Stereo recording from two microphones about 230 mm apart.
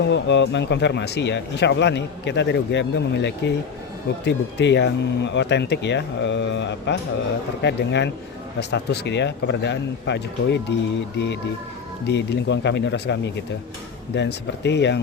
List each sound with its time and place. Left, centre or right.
0.1 s speech: left
12.0 s speech: left